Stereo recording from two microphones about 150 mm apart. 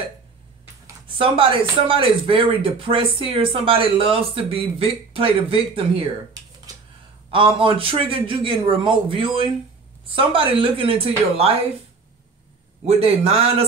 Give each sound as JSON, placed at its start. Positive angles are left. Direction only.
{"t": 1.0, "sound": "speech", "side_deg": -35}
{"t": 7.2, "sound": "speech", "side_deg": -35}
{"t": 12.8, "sound": "a man's voice", "side_deg": -45}